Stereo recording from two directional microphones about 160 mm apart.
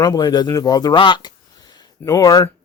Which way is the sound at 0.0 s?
25° left (ahead or behind).